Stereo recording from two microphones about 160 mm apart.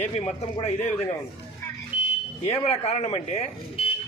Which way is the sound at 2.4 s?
40° left (ahead or behind).